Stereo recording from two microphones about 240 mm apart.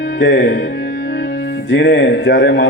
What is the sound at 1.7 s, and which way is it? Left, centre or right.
A man's voice, left.